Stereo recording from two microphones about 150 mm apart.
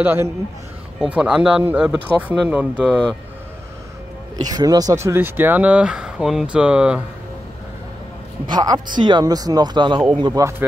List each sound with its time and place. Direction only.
0.0 s speech: 15° right (ahead or behind)
4.4 s speech: 25° right (ahead or behind); by 7.0 s 5° right (ahead or behind)
8.5 s speech: 30° right (ahead or behind)